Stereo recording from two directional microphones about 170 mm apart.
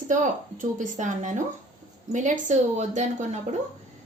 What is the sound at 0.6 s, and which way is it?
A woman's voice, 50° right (ahead or behind).